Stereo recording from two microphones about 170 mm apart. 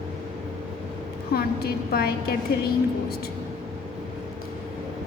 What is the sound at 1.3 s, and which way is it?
Speech, 65° left (ahead or behind).